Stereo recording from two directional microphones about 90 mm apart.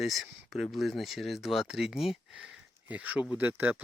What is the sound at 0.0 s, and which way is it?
Speech, centre (ahead or behind).